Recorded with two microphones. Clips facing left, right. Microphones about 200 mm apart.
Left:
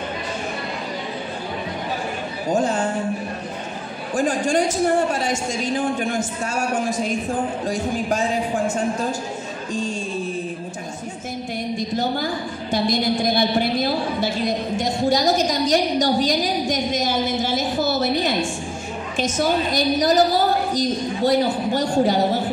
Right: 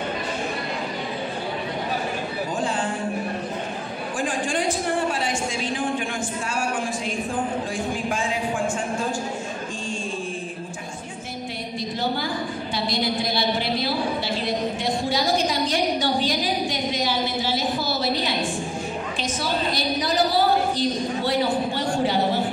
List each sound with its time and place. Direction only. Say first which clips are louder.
2.5 s a sound: left 8 dB; 45° left (ahead or behind)
4.2 s a woman's voice: left 6 dB; 40° left (ahead or behind)
7.7 s speech: left 4 dB; 40° left (ahead or behind)
12.7 s a woman's voice: left 6 dB; 50° left (ahead or behind)